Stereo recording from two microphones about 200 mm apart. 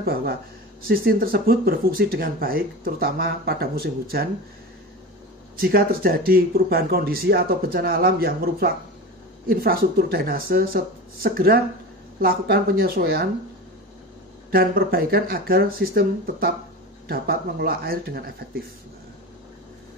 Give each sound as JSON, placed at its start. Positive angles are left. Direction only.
{"t": 0.0, "sound": "speech", "side_deg": -50}
{"t": 5.6, "sound": "speech", "side_deg": -50}
{"t": 14.5, "sound": "speech", "side_deg": -45}